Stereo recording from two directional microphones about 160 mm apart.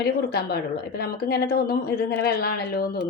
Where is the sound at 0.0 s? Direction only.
80° left.